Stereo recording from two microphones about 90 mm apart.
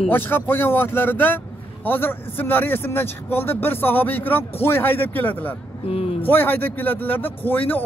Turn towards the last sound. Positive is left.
turn(degrees=20)  # may be behind; listen again after turning